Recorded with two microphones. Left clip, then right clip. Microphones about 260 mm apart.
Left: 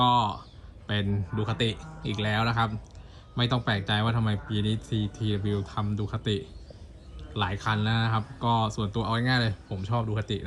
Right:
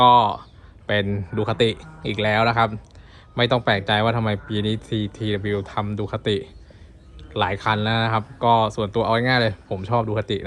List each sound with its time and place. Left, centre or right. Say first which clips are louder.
0.0 s speech: right 9 dB; centre